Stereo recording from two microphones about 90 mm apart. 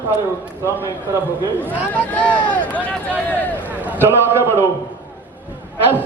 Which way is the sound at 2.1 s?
15° left (ahead or behind).